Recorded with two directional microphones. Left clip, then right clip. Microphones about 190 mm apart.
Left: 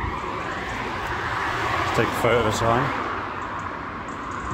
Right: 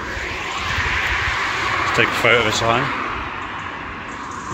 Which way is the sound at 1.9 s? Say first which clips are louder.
Right 6 dB; centre (ahead or behind).